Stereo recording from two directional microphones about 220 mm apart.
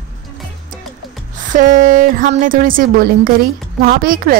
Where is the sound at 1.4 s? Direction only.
35° right (ahead or behind).